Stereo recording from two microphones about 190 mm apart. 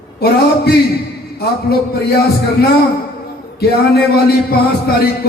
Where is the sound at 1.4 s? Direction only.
55° left (ahead or behind).